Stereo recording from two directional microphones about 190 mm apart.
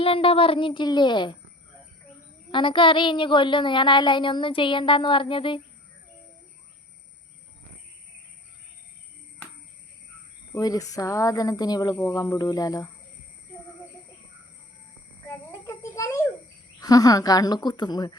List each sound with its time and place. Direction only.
0.0 s speech: 30° left (ahead or behind)
2.5 s speech: 25° left (ahead or behind)
10.5 s speech: 20° left (ahead or behind)
15.6 s a sound: 15° left (ahead or behind)
16.8 s speech: 20° left (ahead or behind)